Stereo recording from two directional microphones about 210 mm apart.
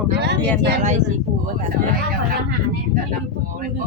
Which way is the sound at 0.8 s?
35° right (ahead or behind).